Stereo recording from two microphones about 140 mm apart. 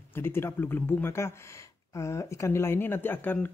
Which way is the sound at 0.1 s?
15° left (ahead or behind).